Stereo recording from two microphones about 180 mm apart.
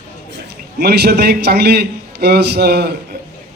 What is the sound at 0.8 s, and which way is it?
A man's voice, 65° right (ahead or behind).